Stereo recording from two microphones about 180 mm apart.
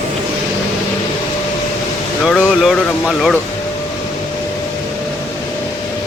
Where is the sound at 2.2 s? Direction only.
Centre (ahead or behind).